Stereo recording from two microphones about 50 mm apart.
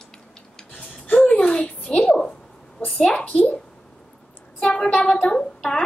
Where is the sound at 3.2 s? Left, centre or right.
Left.